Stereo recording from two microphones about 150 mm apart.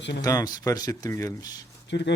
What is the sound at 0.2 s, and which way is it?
Speech, 25° left (ahead or behind).